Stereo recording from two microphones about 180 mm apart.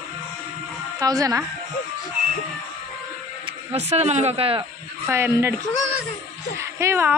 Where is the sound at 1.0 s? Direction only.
20° right (ahead or behind).